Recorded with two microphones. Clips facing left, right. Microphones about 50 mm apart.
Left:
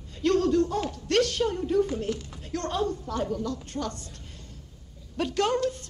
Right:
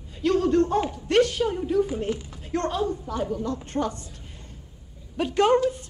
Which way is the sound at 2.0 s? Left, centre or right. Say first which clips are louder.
Right 3 dB; centre.